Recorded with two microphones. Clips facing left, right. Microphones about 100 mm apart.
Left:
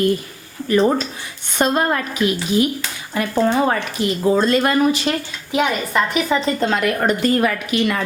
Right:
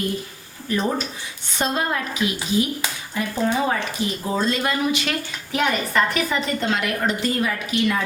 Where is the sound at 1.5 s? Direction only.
50° left (ahead or behind).